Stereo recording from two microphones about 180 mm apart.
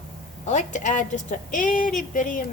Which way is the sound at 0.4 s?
45° left (ahead or behind).